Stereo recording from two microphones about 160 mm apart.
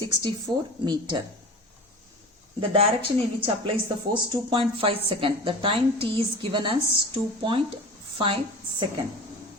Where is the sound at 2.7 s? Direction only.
35° right (ahead or behind).